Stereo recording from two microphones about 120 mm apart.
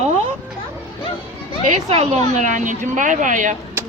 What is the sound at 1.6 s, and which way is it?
A woman's voice, 75° right (ahead or behind).